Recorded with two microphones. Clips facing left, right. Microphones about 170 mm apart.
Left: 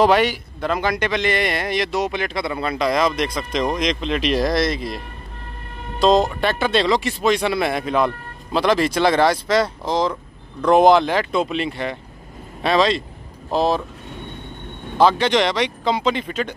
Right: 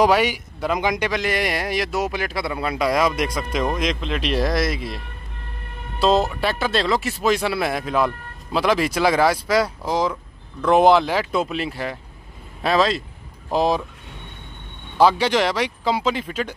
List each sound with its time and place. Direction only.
0.0 s a man's voice: 10° right (ahead or behind)
15.0 s a man's voice: 10° right (ahead or behind)